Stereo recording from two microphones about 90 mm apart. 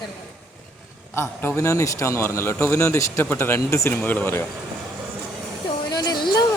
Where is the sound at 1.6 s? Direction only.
35° left (ahead or behind).